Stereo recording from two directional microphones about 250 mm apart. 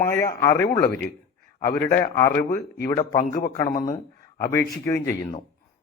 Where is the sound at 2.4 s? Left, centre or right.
Left.